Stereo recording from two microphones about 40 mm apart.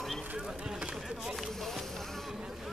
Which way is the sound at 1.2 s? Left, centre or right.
Centre.